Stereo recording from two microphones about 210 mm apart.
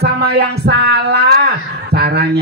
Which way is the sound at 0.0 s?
50° right (ahead or behind).